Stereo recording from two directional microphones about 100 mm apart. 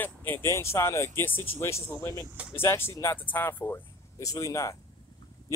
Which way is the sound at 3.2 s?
20° left (ahead or behind).